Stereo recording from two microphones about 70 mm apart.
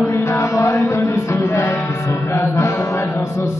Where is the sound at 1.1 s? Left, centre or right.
Left.